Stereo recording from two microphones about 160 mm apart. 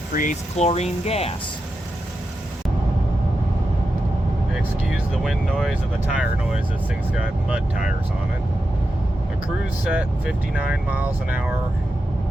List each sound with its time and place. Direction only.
0.1 s speech: 55° left (ahead or behind)
0.5 s speech: 40° left (ahead or behind)
4.9 s speech: centre (ahead or behind)
9.9 s speech: 5° right (ahead or behind)